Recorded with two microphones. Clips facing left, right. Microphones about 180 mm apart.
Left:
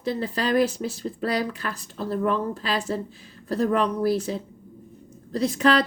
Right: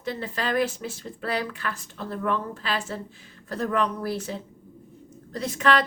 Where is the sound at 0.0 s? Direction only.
35° left (ahead or behind).